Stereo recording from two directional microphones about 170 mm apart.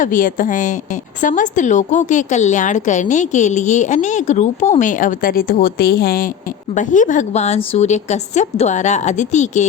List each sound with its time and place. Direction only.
0.0 s a woman's voice: 50° left (ahead or behind)
6.7 s a woman's voice: 45° left (ahead or behind)